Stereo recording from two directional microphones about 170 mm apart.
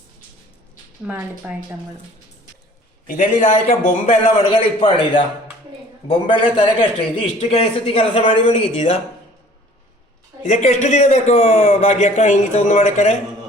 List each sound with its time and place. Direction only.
1.0 s a woman's voice: 10° right (ahead or behind)
3.1 s a man's voice: 45° left (ahead or behind); by 8.8 s 30° left (ahead or behind)
10.4 s a man's voice: 45° left (ahead or behind)